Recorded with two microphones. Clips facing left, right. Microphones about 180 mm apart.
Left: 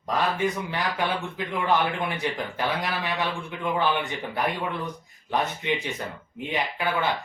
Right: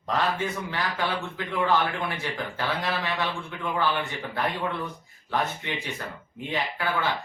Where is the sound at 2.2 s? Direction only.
20° left (ahead or behind).